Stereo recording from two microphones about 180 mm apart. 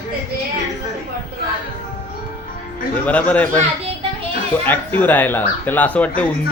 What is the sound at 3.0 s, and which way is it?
Speech, 10° left (ahead or behind).